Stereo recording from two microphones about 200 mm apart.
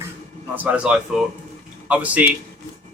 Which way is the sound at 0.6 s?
5° right (ahead or behind).